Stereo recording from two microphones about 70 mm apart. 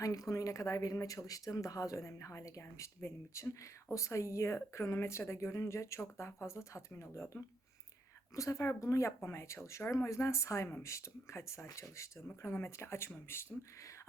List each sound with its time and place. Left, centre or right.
0.0 s speech: left
8.4 s speech: left